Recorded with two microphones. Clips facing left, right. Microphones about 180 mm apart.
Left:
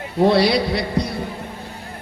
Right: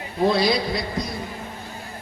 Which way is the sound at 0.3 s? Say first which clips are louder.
Left 4 dB; 70° left (ahead or behind).